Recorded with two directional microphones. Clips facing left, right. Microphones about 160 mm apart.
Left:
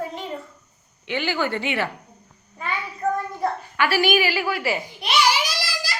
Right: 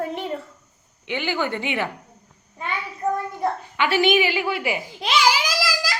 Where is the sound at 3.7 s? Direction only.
20° right (ahead or behind).